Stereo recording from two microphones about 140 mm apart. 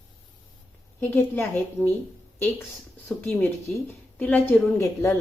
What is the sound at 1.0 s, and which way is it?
Speech, 15° left (ahead or behind).